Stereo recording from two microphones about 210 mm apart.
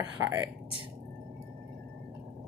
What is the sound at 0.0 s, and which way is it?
Speech, 15° right (ahead or behind).